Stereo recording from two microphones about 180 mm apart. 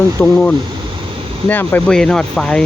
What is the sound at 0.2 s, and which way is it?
Speech, 10° left (ahead or behind).